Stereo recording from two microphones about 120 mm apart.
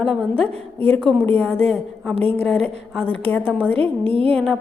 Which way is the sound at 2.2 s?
55° right (ahead or behind).